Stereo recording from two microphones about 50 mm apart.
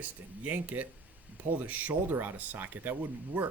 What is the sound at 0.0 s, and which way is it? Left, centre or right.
Speech, right.